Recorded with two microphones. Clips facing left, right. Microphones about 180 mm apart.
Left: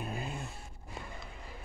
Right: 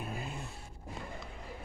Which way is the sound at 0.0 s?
Centre (ahead or behind).